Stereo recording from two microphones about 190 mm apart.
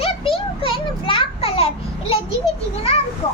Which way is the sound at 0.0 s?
30° left (ahead or behind).